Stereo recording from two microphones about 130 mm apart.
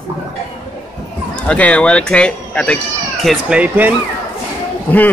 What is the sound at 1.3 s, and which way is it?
Speech, 10° left (ahead or behind).